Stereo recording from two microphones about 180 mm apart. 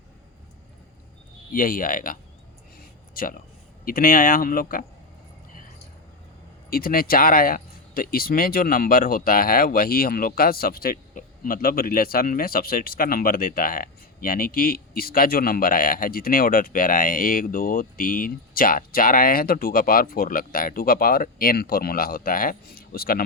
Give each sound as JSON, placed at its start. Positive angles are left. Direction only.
{"t": 1.5, "sound": "speech", "side_deg": 50}
{"t": 2.7, "sound": "a sound", "side_deg": 50}
{"t": 3.8, "sound": "speech", "side_deg": 50}
{"t": 6.7, "sound": "speech", "side_deg": 55}